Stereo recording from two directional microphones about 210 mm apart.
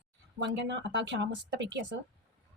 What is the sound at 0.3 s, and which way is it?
Speech, 55° right (ahead or behind).